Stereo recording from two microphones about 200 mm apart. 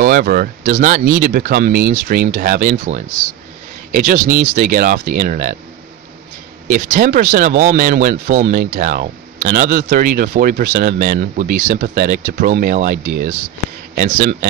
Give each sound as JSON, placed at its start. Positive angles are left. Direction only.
{"t": 0.0, "sound": "speech", "side_deg": -45}
{"t": 6.7, "sound": "speech", "side_deg": -40}